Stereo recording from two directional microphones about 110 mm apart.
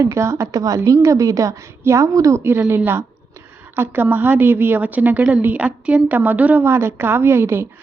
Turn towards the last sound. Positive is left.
turn(degrees=-20)  # may be behind; listen again after turning